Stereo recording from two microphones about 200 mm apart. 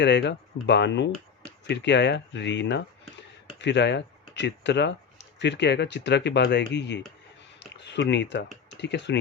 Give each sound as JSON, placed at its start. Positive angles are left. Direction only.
{"t": 0.0, "sound": "speech", "side_deg": 60}